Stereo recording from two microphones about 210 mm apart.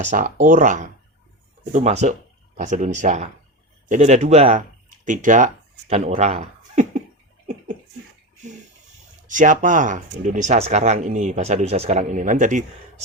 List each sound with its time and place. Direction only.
0.0 s speech: 35° right (ahead or behind)
9.2 s speech: 35° right (ahead or behind)